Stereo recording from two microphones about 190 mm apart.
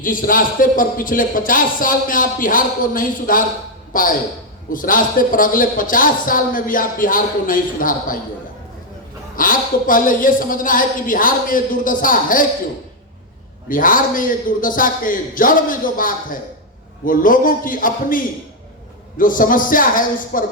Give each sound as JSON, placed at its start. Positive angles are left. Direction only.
{"t": 0.0, "sound": "a man's voice", "side_deg": 45}
{"t": 9.3, "sound": "a man's voice", "side_deg": 45}
{"t": 13.7, "sound": "a man's voice", "side_deg": 45}